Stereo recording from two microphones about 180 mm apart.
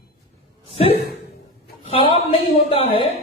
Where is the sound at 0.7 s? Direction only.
30° left (ahead or behind).